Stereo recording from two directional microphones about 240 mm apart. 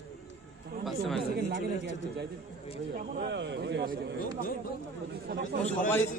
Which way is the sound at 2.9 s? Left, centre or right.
Right.